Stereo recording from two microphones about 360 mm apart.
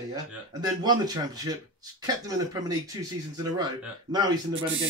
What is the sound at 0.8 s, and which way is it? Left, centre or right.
Speech, centre.